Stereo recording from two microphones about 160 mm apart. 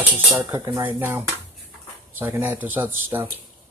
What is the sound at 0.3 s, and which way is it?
Cutlery, 20° right (ahead or behind).